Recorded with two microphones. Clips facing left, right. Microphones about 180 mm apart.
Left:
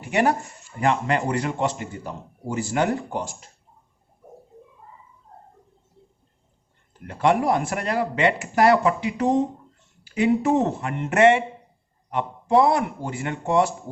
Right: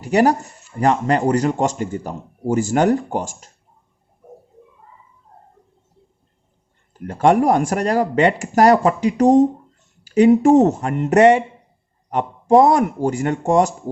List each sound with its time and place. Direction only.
0.0 s speech: 40° right (ahead or behind)
7.1 s speech: 45° right (ahead or behind)